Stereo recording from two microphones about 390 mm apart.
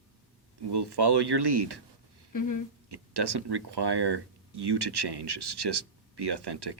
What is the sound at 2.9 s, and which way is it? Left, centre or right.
Speech, right.